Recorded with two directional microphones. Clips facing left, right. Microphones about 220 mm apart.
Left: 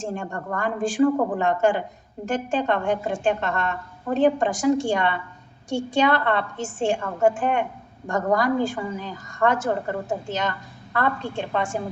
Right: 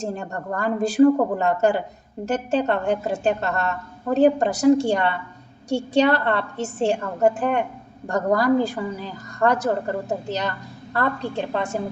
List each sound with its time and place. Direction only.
0.0 s a woman's voice: 40° right (ahead or behind)